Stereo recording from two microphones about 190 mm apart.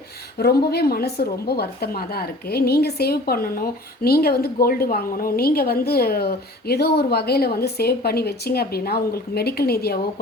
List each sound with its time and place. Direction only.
0.3 s a woman's voice: 55° left (ahead or behind)